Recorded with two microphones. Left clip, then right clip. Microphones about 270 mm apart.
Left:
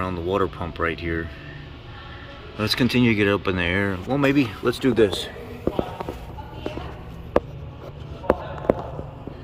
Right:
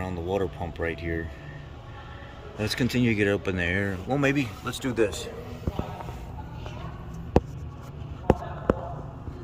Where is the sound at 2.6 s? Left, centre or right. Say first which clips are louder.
Left 6 dB; centre.